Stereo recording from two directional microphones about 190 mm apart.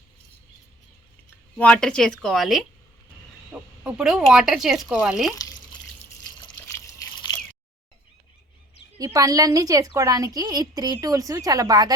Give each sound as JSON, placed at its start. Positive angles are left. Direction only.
{"t": 1.5, "sound": "speech", "side_deg": 5}
{"t": 6.7, "sound": "water", "side_deg": 15}
{"t": 9.0, "sound": "a woman's voice", "side_deg": -20}